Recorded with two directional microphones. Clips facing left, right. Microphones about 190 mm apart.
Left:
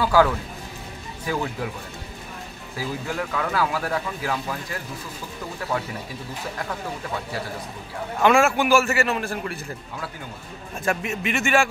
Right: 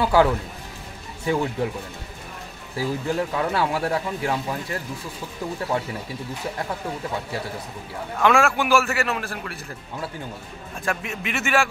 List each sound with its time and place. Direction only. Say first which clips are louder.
0.0 s speech: right 1 dB; 25° right (ahead or behind)
2.8 s speech: right 4 dB; 25° right (ahead or behind)
8.2 s a man's voice: left 1 dB; centre (ahead or behind)
10.9 s a man's voice: left 3 dB; centre (ahead or behind)